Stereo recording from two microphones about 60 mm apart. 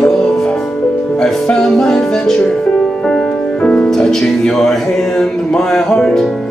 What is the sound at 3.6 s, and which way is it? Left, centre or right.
Music, left.